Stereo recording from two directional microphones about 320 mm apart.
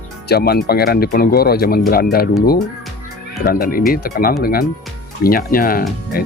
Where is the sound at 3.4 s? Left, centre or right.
Left.